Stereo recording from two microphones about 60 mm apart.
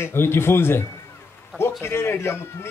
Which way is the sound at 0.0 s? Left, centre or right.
Left.